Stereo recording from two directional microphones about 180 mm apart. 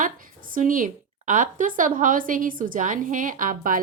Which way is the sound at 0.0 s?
50° right (ahead or behind).